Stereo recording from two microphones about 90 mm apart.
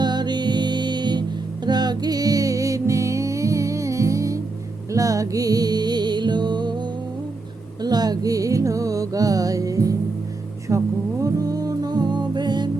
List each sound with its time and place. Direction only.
0.0 s music: 55° right (ahead or behind)
10.7 s a sound: 30° right (ahead or behind)
11.2 s music: 40° right (ahead or behind)